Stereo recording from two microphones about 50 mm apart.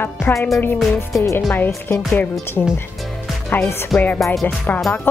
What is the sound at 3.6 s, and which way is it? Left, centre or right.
Speech, left.